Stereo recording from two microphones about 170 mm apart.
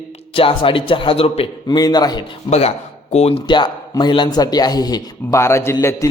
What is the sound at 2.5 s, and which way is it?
A man's voice, 40° left (ahead or behind).